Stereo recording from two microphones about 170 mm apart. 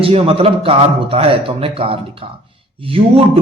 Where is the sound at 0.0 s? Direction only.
35° right (ahead or behind).